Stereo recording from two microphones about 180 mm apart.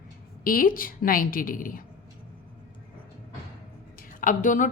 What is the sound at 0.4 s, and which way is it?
A woman's voice, 50° left (ahead or behind).